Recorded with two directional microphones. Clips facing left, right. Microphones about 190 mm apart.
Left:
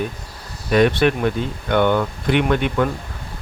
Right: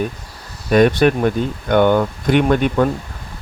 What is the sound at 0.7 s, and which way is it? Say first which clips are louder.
Speech: right 3 dB; 45° right (ahead or behind).